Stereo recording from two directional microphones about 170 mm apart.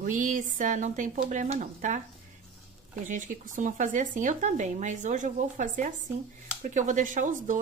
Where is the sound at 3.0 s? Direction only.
50° right (ahead or behind).